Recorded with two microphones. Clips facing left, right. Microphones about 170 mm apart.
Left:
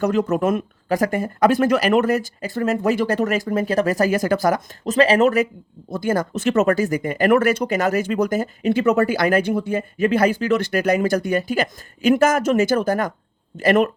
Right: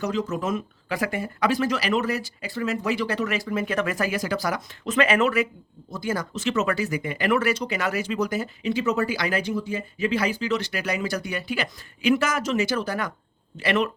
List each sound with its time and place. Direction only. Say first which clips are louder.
0.0 s speech: left 7 dB; 55° left (ahead or behind)
4.9 s speech: left 6 dB; 35° left (ahead or behind)
5.9 s speech: left 7 dB; 55° left (ahead or behind)